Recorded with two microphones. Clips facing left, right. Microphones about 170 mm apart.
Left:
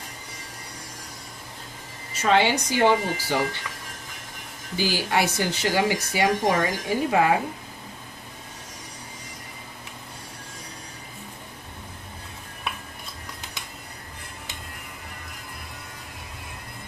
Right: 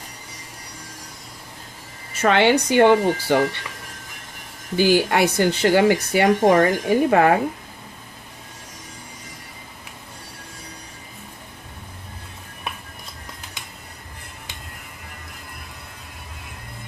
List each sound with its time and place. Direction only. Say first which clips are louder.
2.2 s speech: right 4 dB; 60° right (ahead or behind)
4.8 s speech: right 7 dB; 55° right (ahead or behind)